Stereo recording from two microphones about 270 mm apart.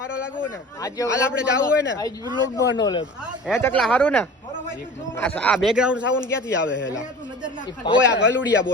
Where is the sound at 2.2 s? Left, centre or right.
Centre.